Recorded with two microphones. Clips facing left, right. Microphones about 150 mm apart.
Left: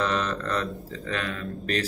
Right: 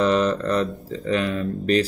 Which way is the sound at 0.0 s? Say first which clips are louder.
Right 8 dB; 20° right (ahead or behind).